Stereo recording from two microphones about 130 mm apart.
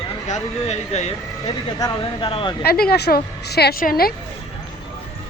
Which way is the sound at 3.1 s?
90° left.